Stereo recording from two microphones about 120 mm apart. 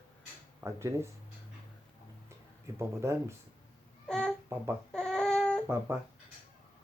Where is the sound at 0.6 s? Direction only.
25° right (ahead or behind).